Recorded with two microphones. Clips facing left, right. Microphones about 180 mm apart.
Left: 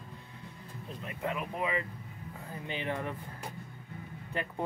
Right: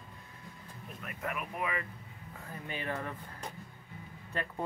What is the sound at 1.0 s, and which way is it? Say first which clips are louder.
Speech: left 3 dB; 25° left (ahead or behind).